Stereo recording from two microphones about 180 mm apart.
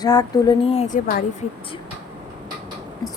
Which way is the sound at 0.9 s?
50° left (ahead or behind).